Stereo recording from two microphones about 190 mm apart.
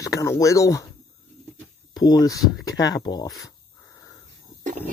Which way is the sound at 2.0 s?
20° left (ahead or behind).